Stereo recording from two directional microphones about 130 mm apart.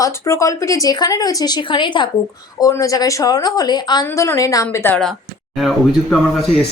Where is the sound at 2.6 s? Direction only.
25° left (ahead or behind).